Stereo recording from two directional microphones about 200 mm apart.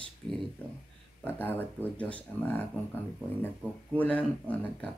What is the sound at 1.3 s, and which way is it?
Speech, 10° left (ahead or behind).